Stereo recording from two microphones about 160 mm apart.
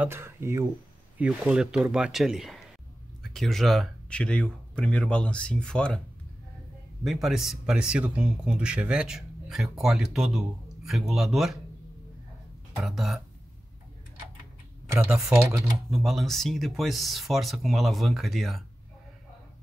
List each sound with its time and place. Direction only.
0.0 s speech: 15° right (ahead or behind); by 5.9 s 5° left (ahead or behind)
7.1 s speech: centre (ahead or behind)
12.7 s speech: centre (ahead or behind)
14.9 s speech: 15° right (ahead or behind)
15.9 s speech: centre (ahead or behind)